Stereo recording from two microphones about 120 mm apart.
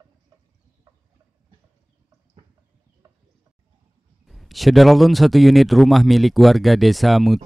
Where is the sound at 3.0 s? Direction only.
30° right (ahead or behind).